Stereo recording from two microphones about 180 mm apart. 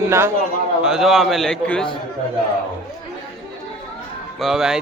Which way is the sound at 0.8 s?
Centre (ahead or behind).